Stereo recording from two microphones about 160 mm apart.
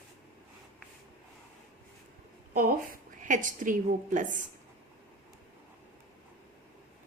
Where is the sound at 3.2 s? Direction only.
55° right (ahead or behind).